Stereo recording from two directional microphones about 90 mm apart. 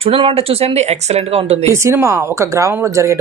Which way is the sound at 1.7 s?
30° right (ahead or behind).